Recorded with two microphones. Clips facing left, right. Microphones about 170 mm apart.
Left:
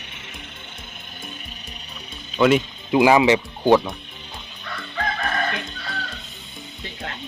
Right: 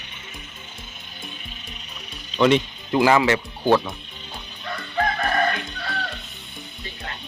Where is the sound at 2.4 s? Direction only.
5° left (ahead or behind).